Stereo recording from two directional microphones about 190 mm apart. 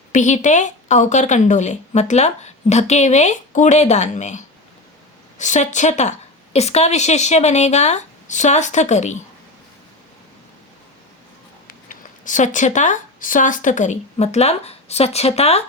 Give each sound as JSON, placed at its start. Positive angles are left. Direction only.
{"t": 0.1, "sound": "a woman's voice", "side_deg": 40}
{"t": 11.7, "sound": "speech", "side_deg": 45}